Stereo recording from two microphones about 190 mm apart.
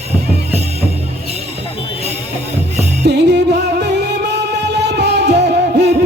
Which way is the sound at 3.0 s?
60° right (ahead or behind).